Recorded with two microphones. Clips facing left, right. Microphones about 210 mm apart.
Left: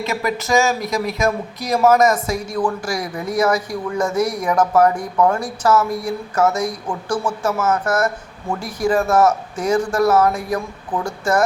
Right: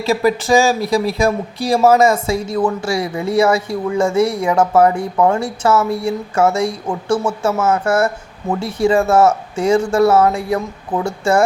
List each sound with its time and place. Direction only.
0.0 s speech: 30° right (ahead or behind)